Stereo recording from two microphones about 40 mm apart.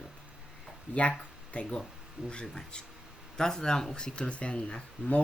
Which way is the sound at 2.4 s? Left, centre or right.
Centre.